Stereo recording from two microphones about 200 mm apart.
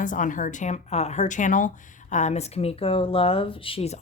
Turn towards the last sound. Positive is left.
turn(degrees=30)  # may be behind; listen again after turning